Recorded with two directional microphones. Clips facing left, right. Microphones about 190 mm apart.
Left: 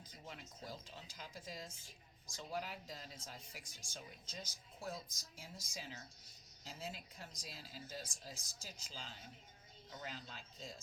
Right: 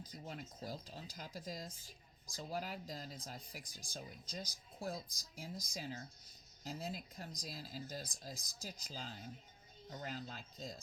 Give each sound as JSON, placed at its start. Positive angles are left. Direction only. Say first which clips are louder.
{"t": 0.3, "sound": "speech", "louder": "right 4 dB", "side_deg": -40}